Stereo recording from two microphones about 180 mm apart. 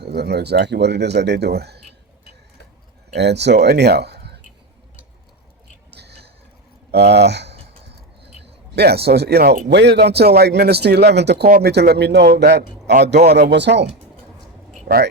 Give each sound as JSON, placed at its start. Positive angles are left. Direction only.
{"t": 0.0, "sound": "speech", "side_deg": -65}
{"t": 3.2, "sound": "speech", "side_deg": -70}
{"t": 5.9, "sound": "a sound", "side_deg": -65}
{"t": 6.9, "sound": "speech", "side_deg": -65}
{"t": 14.8, "sound": "speech", "side_deg": -55}